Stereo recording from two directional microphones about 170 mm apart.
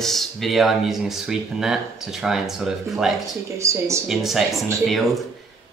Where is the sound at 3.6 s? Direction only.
15° right (ahead or behind).